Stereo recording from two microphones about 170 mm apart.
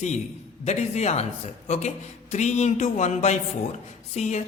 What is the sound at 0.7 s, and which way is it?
A woman's voice, 40° left (ahead or behind).